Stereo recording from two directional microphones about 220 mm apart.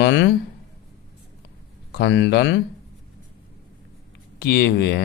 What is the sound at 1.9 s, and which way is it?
Speech, 55° left (ahead or behind).